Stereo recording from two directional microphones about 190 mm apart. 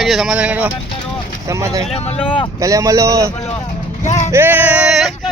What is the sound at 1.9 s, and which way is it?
Speech, 35° left (ahead or behind).